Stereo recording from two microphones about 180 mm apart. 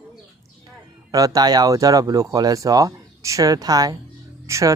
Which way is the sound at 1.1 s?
20° right (ahead or behind).